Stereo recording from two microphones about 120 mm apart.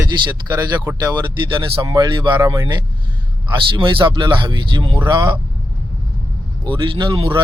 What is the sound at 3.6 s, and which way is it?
Speech, 45° right (ahead or behind).